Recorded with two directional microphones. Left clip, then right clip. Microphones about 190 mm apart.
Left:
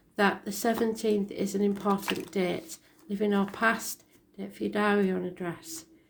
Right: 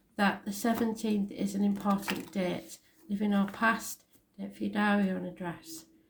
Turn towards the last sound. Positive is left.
turn(degrees=45)  # may be behind; listen again after turning